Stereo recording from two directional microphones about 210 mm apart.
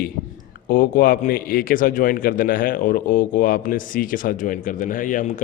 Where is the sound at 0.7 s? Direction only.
40° left (ahead or behind).